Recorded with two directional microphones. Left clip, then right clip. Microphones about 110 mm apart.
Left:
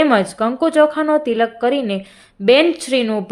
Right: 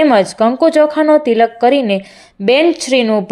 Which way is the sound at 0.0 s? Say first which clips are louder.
Right 5 dB; 35° right (ahead or behind).